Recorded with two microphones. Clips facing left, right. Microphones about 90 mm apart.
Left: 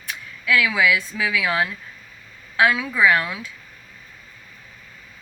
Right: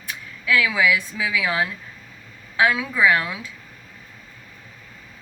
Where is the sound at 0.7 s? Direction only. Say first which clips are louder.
Even; 5° right (ahead or behind).